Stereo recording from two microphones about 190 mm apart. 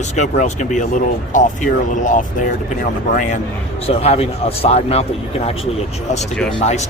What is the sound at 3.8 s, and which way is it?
Speech, 35° left (ahead or behind).